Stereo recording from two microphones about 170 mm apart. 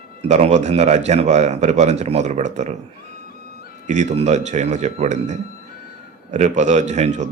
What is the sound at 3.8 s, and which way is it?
Speech, 45° right (ahead or behind).